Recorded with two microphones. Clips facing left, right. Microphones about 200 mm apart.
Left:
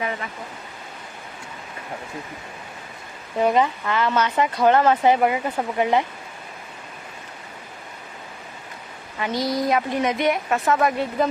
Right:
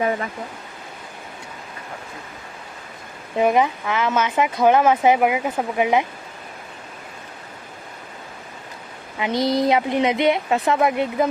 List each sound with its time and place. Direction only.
3.3 s speech: 15° right (ahead or behind)
9.1 s speech: 20° right (ahead or behind)